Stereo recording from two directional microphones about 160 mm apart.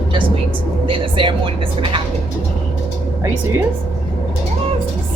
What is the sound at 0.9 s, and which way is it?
Speech, 30° right (ahead or behind).